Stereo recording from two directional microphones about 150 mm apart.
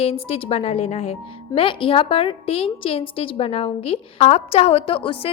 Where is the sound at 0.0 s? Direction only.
40° left (ahead or behind).